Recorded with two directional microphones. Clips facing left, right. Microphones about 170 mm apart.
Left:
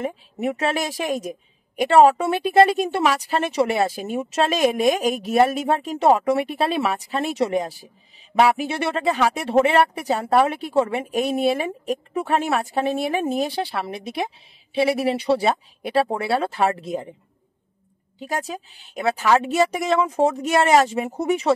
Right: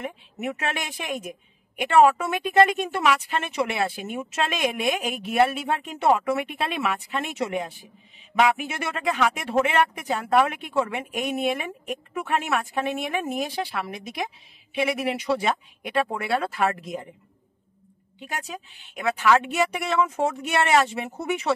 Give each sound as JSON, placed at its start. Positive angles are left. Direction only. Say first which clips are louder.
{"t": 0.0, "sound": "speech", "louder": "left 6 dB", "side_deg": 35}
{"t": 18.2, "sound": "speech", "louder": "left 6 dB", "side_deg": 40}